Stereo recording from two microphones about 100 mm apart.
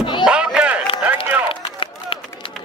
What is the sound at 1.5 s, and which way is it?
Run, 65° left (ahead or behind).